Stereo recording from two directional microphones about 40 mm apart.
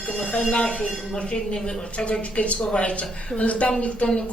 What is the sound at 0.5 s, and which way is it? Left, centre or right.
Speech, left.